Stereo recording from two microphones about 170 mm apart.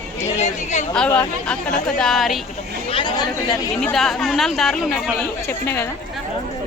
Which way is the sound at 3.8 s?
Centre (ahead or behind).